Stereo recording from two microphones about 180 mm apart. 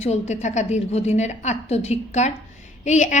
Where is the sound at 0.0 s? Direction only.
40° left (ahead or behind).